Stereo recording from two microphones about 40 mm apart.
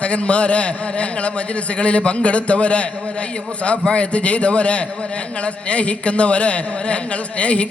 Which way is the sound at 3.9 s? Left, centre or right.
Left.